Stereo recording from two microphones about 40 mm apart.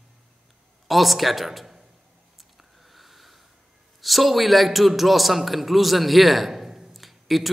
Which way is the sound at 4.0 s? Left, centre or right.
Centre.